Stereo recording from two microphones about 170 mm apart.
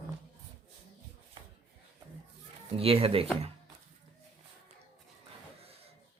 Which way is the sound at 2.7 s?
35° right (ahead or behind).